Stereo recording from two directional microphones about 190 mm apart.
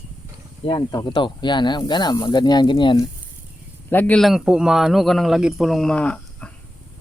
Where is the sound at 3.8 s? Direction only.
10° left (ahead or behind).